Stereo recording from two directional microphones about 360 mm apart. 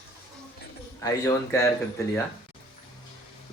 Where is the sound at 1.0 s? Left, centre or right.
Centre.